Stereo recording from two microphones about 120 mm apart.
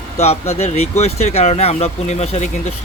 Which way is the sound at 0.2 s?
60° left (ahead or behind).